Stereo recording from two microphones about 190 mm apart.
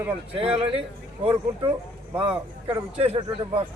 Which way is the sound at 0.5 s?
30° right (ahead or behind).